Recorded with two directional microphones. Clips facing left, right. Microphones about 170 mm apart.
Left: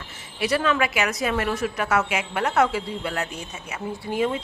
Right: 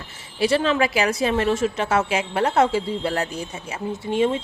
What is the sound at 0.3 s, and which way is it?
A woman's voice, 30° right (ahead or behind).